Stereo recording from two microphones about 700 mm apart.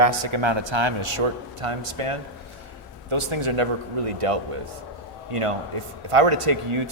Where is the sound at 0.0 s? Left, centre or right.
Right.